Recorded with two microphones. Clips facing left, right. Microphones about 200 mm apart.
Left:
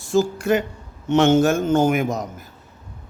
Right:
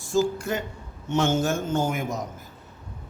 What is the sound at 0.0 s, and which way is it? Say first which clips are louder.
A man's voice: left 4 dB; 75° left (ahead or behind).